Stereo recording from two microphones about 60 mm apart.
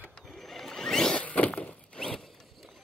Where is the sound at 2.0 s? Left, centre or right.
Centre.